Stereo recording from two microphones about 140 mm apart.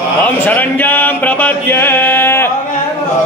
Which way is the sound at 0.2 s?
10° left (ahead or behind).